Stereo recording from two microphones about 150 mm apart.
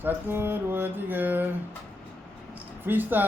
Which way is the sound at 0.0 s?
15° right (ahead or behind).